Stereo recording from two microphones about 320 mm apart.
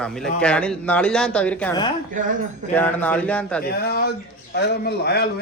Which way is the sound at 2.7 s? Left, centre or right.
Centre.